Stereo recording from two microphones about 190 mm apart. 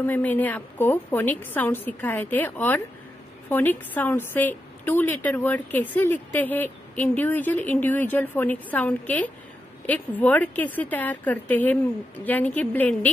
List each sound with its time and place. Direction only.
0.0 s a woman's voice: 10° left (ahead or behind)